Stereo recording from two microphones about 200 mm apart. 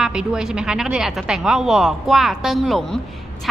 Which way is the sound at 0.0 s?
5° right (ahead or behind).